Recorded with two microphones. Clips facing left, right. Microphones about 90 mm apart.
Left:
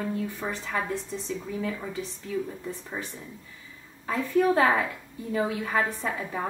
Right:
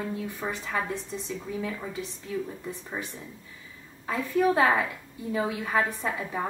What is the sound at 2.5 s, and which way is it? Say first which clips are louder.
Speech: left 1 dB; 10° right (ahead or behind).